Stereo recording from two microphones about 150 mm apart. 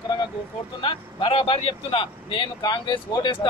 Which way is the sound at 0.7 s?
35° left (ahead or behind).